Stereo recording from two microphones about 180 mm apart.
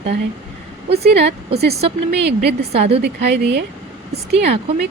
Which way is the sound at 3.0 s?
70° right (ahead or behind).